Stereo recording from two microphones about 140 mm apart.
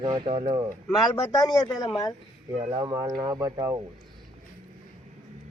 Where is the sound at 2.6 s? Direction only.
50° right (ahead or behind).